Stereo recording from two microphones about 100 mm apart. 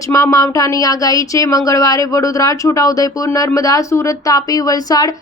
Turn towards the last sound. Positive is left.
turn(degrees=40)  # may be behind; listen again after turning